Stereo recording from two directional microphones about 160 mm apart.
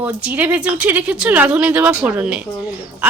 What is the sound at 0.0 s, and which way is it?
Speech, 10° right (ahead or behind).